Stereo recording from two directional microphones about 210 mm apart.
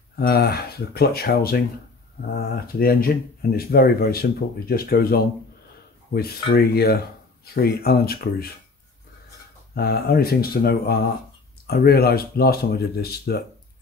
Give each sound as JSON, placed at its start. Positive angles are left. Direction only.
{"t": 0.1, "sound": "speech", "side_deg": 45}
{"t": 9.8, "sound": "speech", "side_deg": 50}